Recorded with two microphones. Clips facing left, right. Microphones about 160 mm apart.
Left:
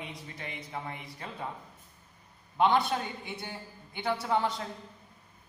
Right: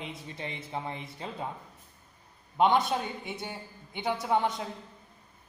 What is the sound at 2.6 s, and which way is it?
A man's voice, 20° right (ahead or behind).